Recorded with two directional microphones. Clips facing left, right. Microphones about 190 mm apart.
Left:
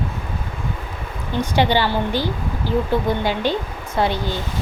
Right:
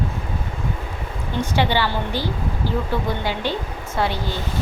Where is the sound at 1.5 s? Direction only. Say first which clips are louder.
Left 3 dB; 15° left (ahead or behind).